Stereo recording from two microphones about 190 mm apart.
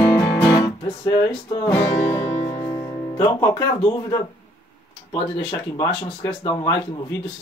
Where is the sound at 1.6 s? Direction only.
15° left (ahead or behind).